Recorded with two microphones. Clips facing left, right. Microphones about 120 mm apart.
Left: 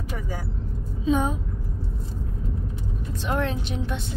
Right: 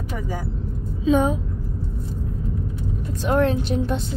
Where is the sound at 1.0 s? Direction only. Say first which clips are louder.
Right 5 dB; 90° right.